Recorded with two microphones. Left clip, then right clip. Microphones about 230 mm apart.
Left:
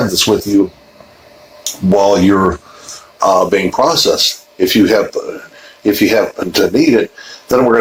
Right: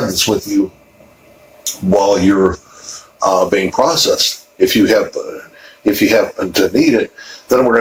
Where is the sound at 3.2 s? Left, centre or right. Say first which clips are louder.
Left 2 dB; left.